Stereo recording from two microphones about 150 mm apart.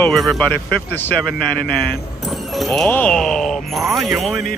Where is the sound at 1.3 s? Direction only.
90° left.